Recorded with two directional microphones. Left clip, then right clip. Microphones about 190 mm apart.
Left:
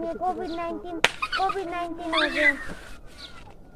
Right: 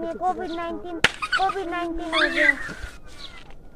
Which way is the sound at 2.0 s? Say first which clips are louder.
Right 3 dB; 55° right (ahead or behind).